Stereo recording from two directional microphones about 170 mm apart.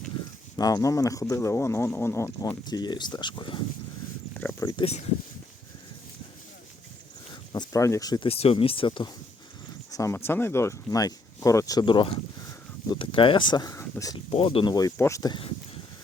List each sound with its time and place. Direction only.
0.5 s speech: 20° left (ahead or behind)
4.4 s a sound: 10° left (ahead or behind)
4.8 s speech: 35° left (ahead or behind)
7.5 s speech: 20° left (ahead or behind)
8.3 s speech: 35° left (ahead or behind)
9.9 s speech: 15° left (ahead or behind)
14.3 s speech: 35° left (ahead or behind)